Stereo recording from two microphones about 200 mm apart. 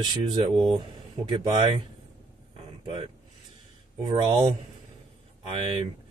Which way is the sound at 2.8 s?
25° right (ahead or behind).